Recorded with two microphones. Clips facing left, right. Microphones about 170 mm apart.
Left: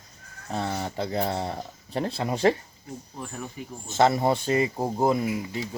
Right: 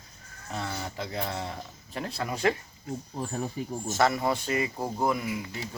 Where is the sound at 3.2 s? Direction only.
35° right (ahead or behind).